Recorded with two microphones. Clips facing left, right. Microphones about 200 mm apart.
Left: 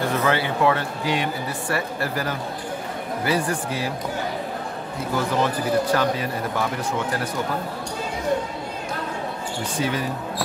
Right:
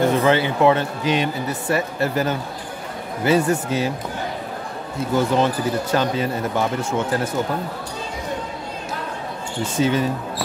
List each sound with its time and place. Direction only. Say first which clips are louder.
0.0 s speech: right 5 dB; 20° right (ahead or behind)
5.1 s speech: right 4 dB; 25° right (ahead or behind)
9.6 s speech: right 6 dB; 25° right (ahead or behind)